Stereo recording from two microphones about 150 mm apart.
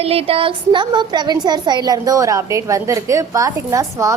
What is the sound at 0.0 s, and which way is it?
A woman's voice, 40° right (ahead or behind).